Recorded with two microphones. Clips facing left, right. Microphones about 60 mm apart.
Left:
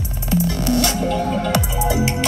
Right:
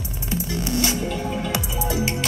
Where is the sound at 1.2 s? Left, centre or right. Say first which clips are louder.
Left 6 dB; left.